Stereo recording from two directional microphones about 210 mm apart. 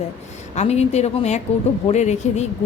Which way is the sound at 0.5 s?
30° left (ahead or behind).